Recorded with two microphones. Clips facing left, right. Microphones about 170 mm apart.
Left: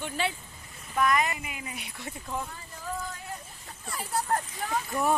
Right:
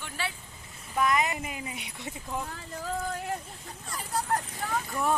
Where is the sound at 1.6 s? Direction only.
20° right (ahead or behind).